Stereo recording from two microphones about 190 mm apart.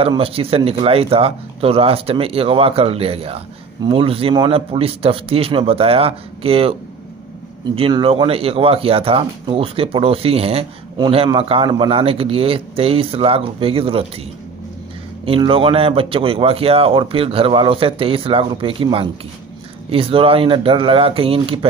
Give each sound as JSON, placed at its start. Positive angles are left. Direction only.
{"t": 0.0, "sound": "speech", "side_deg": -30}
{"t": 7.7, "sound": "speech", "side_deg": -30}
{"t": 15.2, "sound": "speech", "side_deg": -30}